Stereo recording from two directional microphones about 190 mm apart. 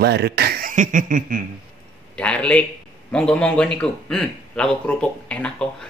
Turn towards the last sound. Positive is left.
turn(degrees=5)  # may be behind; listen again after turning